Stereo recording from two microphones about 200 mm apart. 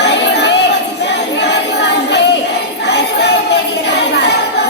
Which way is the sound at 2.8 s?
55° left (ahead or behind).